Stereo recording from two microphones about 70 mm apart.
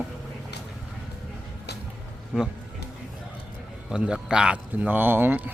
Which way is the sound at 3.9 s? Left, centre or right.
Centre.